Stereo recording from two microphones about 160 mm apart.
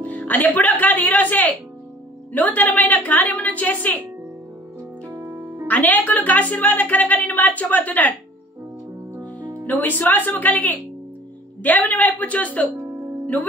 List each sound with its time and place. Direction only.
0.0 s speech: 10° left (ahead or behind)
5.1 s music: 15° right (ahead or behind)
5.7 s speech: 10° left (ahead or behind)
9.7 s speech: 10° left (ahead or behind)